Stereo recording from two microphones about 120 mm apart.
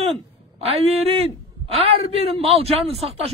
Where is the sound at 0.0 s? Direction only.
50° right (ahead or behind).